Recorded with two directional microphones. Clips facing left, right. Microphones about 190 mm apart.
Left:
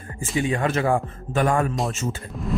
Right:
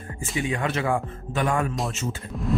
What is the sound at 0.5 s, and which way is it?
Speech, 45° left (ahead or behind).